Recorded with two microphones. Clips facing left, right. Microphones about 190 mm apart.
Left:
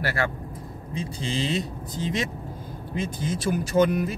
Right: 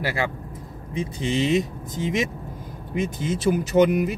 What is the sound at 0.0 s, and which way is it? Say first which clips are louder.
Speech: right 1 dB; 15° right (ahead or behind).